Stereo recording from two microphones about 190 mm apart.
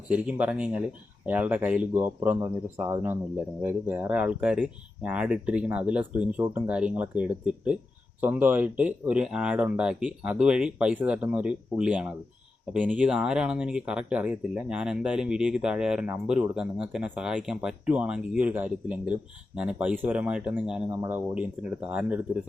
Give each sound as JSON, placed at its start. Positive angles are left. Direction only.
{"t": 0.1, "sound": "speech", "side_deg": -5}